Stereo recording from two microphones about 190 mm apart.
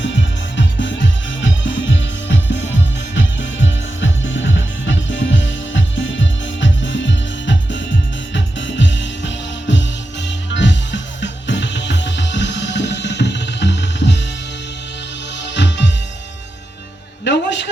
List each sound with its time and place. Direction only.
0.5 s music: 70° left (ahead or behind)
15.4 s music: 65° left (ahead or behind)
17.2 s a sound: 65° left (ahead or behind)